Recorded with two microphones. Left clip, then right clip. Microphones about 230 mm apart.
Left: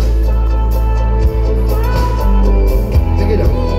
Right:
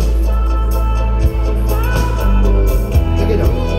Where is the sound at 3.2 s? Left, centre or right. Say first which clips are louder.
Left 1 dB; right.